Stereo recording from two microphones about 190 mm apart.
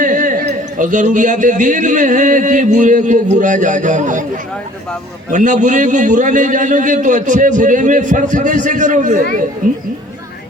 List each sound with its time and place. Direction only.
0.0 s speech: 45° right (ahead or behind)
5.3 s a man's voice: 40° right (ahead or behind)